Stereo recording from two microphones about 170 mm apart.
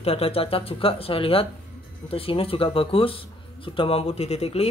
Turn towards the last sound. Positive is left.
turn(degrees=35)  # may be behind; listen again after turning